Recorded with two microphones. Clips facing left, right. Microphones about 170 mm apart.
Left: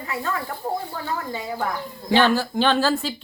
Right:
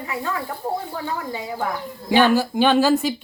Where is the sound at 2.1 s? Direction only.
10° right (ahead or behind).